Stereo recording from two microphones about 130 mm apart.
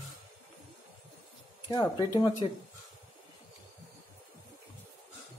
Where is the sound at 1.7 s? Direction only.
35° left (ahead or behind).